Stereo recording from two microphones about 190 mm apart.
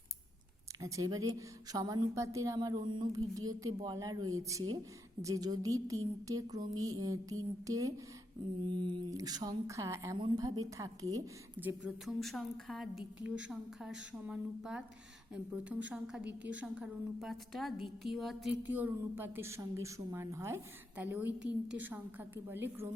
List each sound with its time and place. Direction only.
0.8 s a woman's voice: 15° right (ahead or behind)
11.6 s a woman's voice: 5° right (ahead or behind)
15.9 s a woman's voice: 5° right (ahead or behind)